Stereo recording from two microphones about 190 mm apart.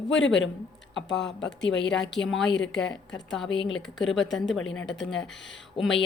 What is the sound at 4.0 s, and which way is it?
A woman's voice, centre (ahead or behind).